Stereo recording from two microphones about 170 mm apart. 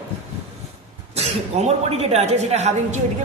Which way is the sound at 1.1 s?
40° right (ahead or behind).